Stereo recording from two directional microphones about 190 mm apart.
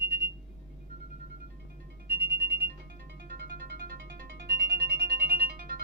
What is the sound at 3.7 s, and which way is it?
Music, 50° right (ahead or behind).